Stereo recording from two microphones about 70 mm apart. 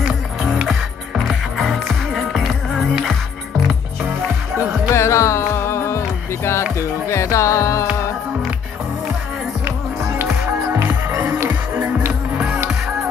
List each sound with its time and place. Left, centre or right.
1.2 s music: centre
4.9 s music: left
6.8 s speech: left
10.4 s music: right
12.1 s music: centre